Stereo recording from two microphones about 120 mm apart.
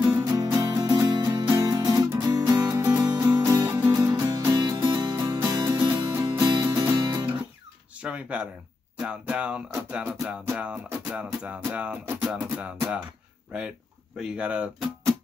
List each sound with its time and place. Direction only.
0.2 s music: 35° right (ahead or behind)
8.0 s a sound: 10° right (ahead or behind)
9.0 s music: 10° right (ahead or behind)
14.2 s speech: 10° right (ahead or behind)